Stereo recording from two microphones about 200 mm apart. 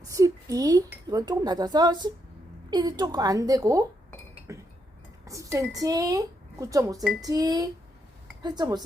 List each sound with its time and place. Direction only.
0.0 s a woman's voice: 15° right (ahead or behind)
4.5 s chink: 15° right (ahead or behind)
5.2 s a woman's voice: 15° right (ahead or behind)